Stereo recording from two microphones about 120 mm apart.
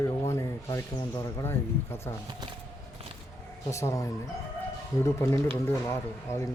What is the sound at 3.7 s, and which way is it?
Speech, 25° left (ahead or behind).